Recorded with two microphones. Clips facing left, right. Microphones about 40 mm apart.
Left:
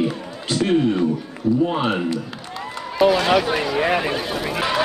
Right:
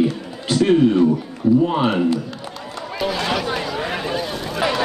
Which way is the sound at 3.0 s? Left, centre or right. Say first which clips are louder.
Left 6 dB; centre.